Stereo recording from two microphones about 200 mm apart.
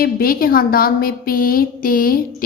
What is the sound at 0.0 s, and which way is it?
A woman's voice, 45° left (ahead or behind).